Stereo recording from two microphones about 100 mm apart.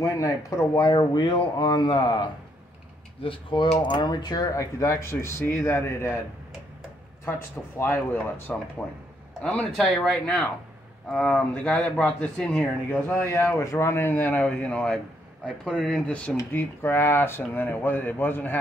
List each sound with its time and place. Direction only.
0.7 s speech: 45° left (ahead or behind)
3.2 s speech: 65° left (ahead or behind); by 6.1 s 25° left (ahead or behind)
7.2 s a man's voice: 20° left (ahead or behind)
13.1 s a man's voice: 30° left (ahead or behind); by 16.3 s 10° left (ahead or behind)
16.5 s speech: 20° left (ahead or behind)